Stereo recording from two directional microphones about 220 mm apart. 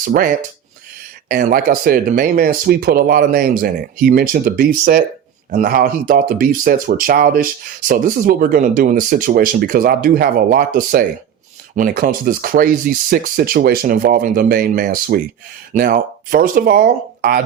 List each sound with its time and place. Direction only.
0.0 s speech: 40° right (ahead or behind)